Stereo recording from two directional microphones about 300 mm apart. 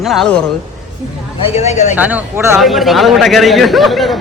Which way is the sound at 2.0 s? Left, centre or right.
Centre.